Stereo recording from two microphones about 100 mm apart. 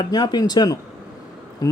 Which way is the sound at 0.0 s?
45° left (ahead or behind).